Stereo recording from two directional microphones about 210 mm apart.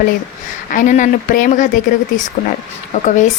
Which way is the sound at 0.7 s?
35° left (ahead or behind).